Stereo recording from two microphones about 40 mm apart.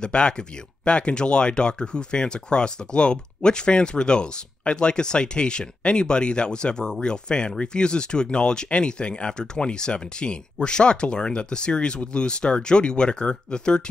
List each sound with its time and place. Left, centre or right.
0.0 s speech: left